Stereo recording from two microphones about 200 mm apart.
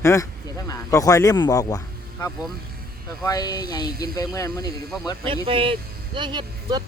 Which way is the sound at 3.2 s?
20° left (ahead or behind).